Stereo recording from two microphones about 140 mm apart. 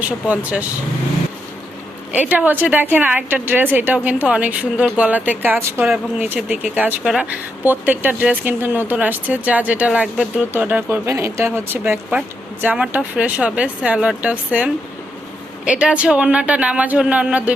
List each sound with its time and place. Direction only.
0.0 s speech: 10° right (ahead or behind)
2.1 s speech: 10° right (ahead or behind)